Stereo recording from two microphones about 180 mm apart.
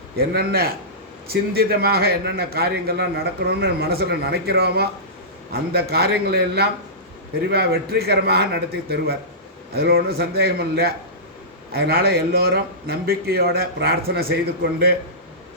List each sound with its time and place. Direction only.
0.2 s a man's voice: 60° right (ahead or behind)
9.7 s a man's voice: 60° right (ahead or behind)